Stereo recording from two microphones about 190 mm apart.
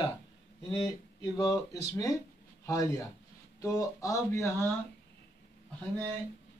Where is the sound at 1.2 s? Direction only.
20° left (ahead or behind).